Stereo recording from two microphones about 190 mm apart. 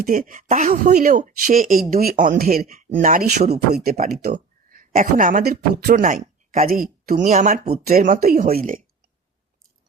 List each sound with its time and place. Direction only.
0.0 s speech: 45° right (ahead or behind)
4.2 s a sound: 50° right (ahead or behind)
4.9 s speech: 45° right (ahead or behind)